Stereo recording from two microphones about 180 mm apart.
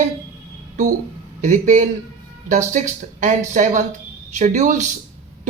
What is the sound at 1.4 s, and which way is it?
Speech, 45° right (ahead or behind).